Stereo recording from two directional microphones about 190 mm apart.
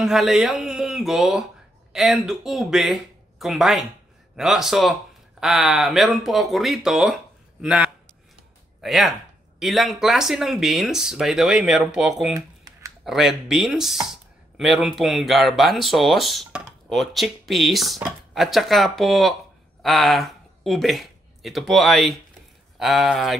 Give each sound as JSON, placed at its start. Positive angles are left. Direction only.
{"t": 0.0, "sound": "a man's voice", "side_deg": 0}
{"t": 12.4, "sound": "computer keyboard", "side_deg": -20}
{"t": 13.0, "sound": "speech", "side_deg": 0}